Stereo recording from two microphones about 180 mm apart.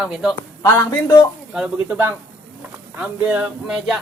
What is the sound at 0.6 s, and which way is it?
Speech, 20° left (ahead or behind).